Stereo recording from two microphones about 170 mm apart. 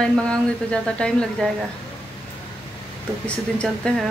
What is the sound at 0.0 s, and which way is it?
A woman's voice, 5° left (ahead or behind).